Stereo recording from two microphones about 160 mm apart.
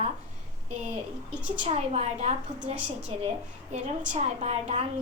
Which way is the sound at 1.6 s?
40° right (ahead or behind).